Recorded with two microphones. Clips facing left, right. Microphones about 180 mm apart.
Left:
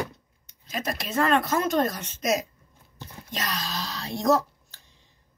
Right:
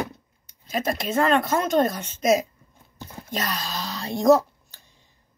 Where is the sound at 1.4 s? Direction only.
25° right (ahead or behind).